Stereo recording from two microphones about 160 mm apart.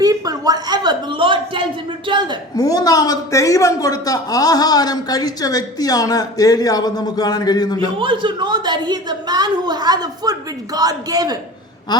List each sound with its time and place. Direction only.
0.0 s a woman's voice: 25° right (ahead or behind)
2.6 s speech: 25° left (ahead or behind)
7.9 s a woman's voice: 30° right (ahead or behind)